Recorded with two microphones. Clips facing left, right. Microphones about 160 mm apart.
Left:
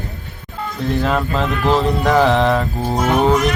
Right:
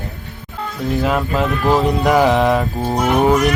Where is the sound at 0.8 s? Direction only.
5° right (ahead or behind).